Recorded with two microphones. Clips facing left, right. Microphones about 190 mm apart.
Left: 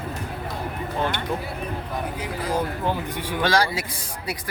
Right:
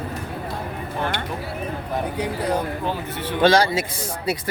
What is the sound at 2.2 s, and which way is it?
Speech, 65° right (ahead or behind).